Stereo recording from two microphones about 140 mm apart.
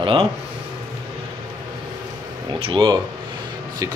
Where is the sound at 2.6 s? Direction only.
35° right (ahead or behind).